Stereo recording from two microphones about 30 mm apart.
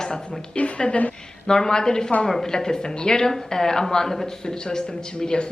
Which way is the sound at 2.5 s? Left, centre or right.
Left.